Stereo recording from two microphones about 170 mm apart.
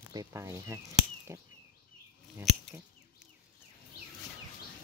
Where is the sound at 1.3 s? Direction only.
15° right (ahead or behind).